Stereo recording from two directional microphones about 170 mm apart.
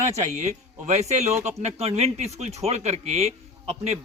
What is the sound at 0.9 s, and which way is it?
Speech, 40° right (ahead or behind).